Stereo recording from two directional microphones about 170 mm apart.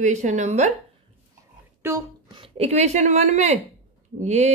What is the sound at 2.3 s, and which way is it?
Speech, 35° right (ahead or behind).